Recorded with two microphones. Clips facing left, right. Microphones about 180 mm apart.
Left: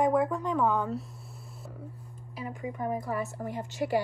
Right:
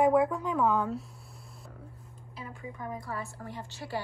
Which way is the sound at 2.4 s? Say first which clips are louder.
Left 6 dB; 15° left (ahead or behind).